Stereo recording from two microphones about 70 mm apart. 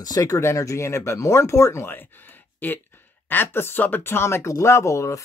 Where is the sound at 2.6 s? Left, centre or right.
Left.